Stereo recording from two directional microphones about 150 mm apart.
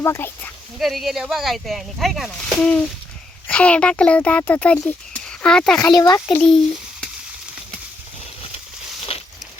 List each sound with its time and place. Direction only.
0.0 s speech: 15° left (ahead or behind)
0.8 s a child's voice: centre (ahead or behind)
5.9 s a child's voice: 25° left (ahead or behind)
6.3 s speech: 5° left (ahead or behind)
9.1 s a sound: 40° left (ahead or behind)